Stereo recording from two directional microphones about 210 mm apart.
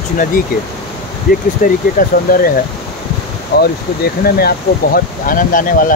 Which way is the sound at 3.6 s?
45° left (ahead or behind).